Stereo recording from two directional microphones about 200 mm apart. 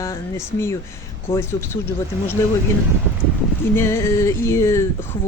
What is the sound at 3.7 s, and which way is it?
Speech, 15° left (ahead or behind).